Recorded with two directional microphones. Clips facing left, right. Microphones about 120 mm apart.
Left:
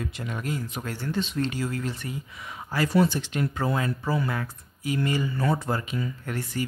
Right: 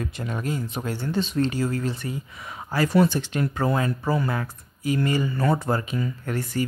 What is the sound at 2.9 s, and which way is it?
Speech, 55° right (ahead or behind).